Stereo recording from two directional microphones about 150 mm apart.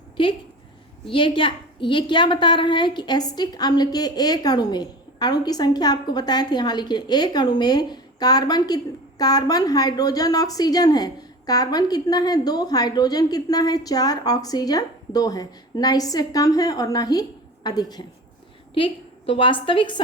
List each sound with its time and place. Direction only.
1.0 s a woman's voice: 35° left (ahead or behind)
18.7 s a woman's voice: 40° left (ahead or behind)